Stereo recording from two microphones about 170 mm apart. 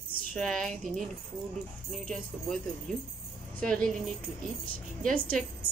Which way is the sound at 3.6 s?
5° left (ahead or behind).